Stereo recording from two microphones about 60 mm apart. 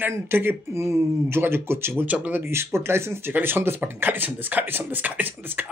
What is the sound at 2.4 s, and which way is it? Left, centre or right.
Speech, right.